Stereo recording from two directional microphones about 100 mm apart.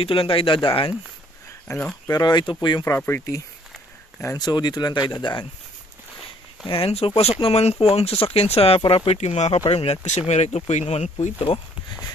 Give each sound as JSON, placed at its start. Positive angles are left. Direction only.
{"t": 0.0, "sound": "speech", "side_deg": 65}
{"t": 1.7, "sound": "speech", "side_deg": 30}
{"t": 2.0, "sound": "speech", "side_deg": 45}
{"t": 3.0, "sound": "speech", "side_deg": 20}
{"t": 4.4, "sound": "speech", "side_deg": 45}
{"t": 6.7, "sound": "speech", "side_deg": 75}